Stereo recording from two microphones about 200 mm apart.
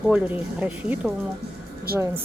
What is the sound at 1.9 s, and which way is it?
Speech, 50° right (ahead or behind).